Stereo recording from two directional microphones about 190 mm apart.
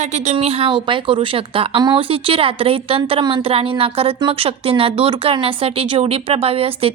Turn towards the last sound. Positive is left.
turn(degrees=-30)  # may be behind; listen again after turning